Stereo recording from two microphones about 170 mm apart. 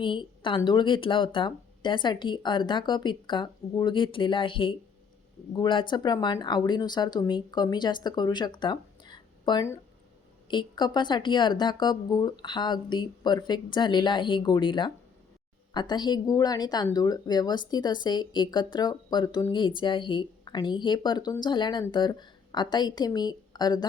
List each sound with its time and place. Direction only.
0.0 s speech: 30° left (ahead or behind)